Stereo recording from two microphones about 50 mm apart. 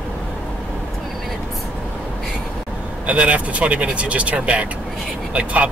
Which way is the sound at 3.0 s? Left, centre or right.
Right.